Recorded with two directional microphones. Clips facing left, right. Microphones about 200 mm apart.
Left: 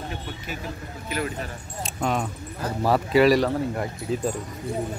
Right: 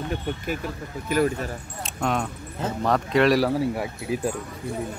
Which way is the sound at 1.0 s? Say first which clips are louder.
Right 7 dB; 45° right (ahead or behind).